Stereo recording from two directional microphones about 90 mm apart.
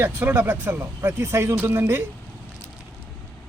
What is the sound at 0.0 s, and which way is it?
Speech, 25° right (ahead or behind).